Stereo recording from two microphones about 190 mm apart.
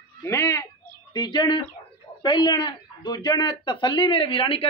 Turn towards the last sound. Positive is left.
turn(degrees=30)  # may be behind; listen again after turning